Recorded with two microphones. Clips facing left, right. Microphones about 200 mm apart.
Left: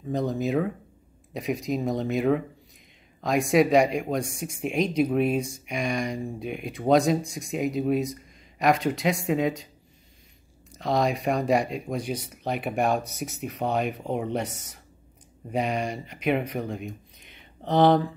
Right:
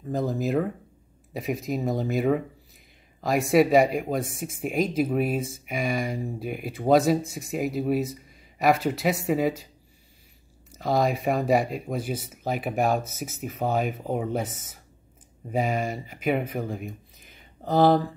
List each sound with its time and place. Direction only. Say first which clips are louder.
0.1 s speech: even; centre (ahead or behind)
10.7 s speech: right 1 dB; 5° right (ahead or behind)